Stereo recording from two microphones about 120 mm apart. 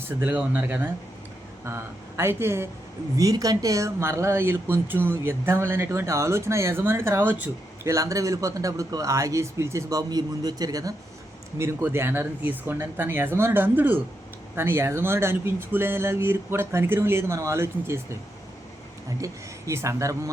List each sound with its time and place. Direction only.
0.1 s speech: 15° right (ahead or behind)
7.9 s speech: 25° right (ahead or behind)
19.2 s speech: 25° right (ahead or behind)